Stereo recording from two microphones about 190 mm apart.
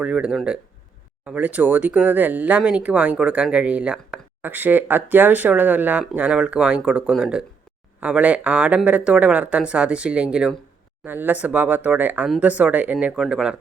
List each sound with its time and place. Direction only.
0.0 s speech: 5° right (ahead or behind)